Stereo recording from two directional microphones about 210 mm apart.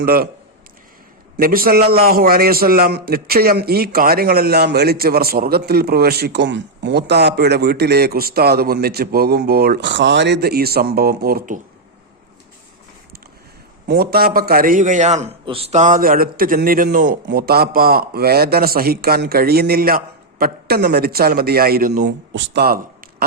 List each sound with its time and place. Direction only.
0.0 s a man's voice: 45° right (ahead or behind)
1.4 s a man's voice: 45° right (ahead or behind)
13.8 s a man's voice: 50° right (ahead or behind)
22.0 s a man's voice: 55° right (ahead or behind)